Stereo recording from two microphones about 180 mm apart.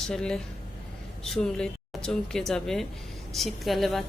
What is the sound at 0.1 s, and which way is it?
A woman's voice, 5° left (ahead or behind).